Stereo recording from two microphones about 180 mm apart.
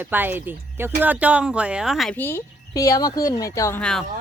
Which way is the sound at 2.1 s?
15° left (ahead or behind).